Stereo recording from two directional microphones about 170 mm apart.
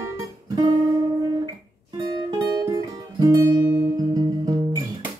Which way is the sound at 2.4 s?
20° right (ahead or behind).